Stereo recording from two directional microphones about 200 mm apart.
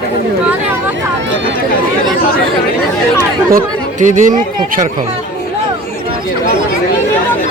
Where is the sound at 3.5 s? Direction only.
40° right (ahead or behind).